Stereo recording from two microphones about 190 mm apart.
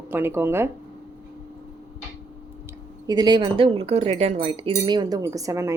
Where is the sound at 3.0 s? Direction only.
20° right (ahead or behind).